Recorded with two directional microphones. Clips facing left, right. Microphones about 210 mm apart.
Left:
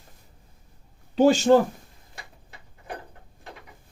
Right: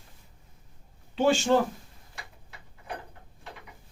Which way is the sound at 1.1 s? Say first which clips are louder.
Left 6 dB; 40° left (ahead or behind).